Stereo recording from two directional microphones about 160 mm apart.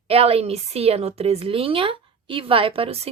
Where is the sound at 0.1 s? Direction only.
40° right (ahead or behind).